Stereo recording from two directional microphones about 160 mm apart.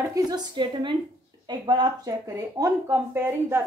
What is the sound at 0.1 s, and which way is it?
A woman's voice, 25° right (ahead or behind).